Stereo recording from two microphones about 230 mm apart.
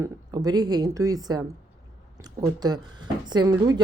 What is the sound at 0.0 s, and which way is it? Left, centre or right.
Speech, centre.